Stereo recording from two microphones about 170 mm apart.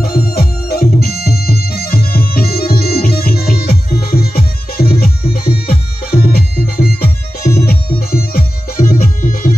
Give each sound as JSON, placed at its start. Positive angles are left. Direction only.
{"t": 0.0, "sound": "music", "side_deg": 60}